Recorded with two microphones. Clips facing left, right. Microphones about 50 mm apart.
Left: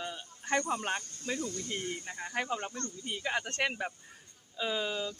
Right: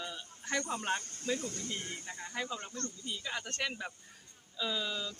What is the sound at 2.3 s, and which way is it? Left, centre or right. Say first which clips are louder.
Speech: left 5 dB; left.